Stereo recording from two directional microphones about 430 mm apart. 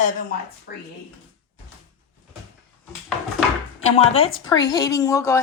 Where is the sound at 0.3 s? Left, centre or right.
Centre.